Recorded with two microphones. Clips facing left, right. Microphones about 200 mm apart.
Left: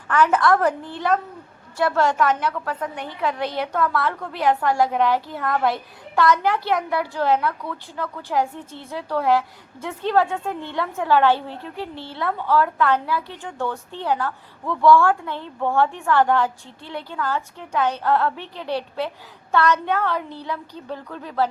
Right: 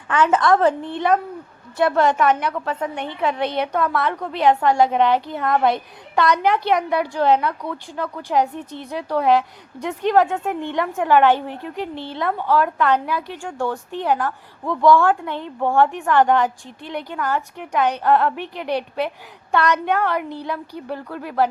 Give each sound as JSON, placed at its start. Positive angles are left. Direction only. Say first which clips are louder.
{"t": 0.1, "sound": "a woman's voice", "louder": "right 1 dB", "side_deg": -20}